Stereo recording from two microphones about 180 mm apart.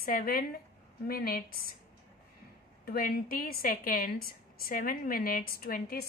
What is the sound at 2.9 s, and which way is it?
A woman's voice, 55° left (ahead or behind).